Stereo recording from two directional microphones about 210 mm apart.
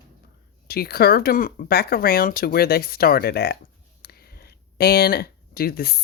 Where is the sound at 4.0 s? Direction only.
45° left (ahead or behind).